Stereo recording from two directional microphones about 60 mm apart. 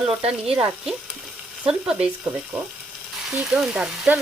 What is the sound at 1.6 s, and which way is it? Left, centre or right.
Speech, centre.